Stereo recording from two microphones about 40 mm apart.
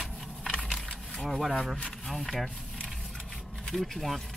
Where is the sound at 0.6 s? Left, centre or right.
Centre.